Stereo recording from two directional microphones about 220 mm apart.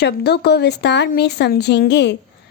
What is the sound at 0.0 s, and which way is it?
A woman's voice, 50° left (ahead or behind).